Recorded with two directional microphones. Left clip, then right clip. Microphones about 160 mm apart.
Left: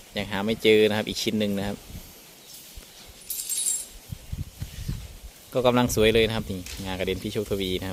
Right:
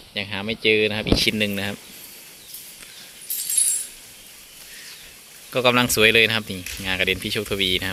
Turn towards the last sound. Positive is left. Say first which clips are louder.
# right 6 dB
turn(degrees=15)  # may be behind; listen again after turning